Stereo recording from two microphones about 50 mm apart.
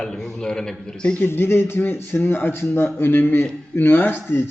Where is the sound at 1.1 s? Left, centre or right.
Left.